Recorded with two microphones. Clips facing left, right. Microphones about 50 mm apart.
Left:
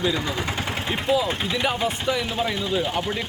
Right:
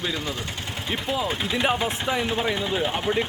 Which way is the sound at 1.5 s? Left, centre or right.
Centre.